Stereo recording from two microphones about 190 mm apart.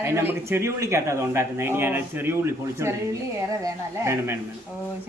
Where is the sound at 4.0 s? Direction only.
15° right (ahead or behind).